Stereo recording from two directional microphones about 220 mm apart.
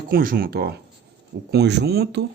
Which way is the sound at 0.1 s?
40° right (ahead or behind).